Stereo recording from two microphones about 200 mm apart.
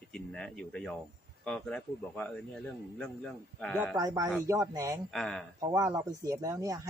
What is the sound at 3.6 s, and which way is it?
Speech, 5° left (ahead or behind).